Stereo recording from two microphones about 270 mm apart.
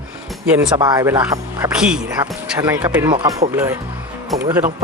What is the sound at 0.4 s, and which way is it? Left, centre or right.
Speech, centre.